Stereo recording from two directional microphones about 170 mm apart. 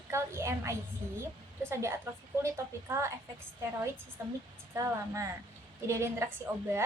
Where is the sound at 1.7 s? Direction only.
15° right (ahead or behind).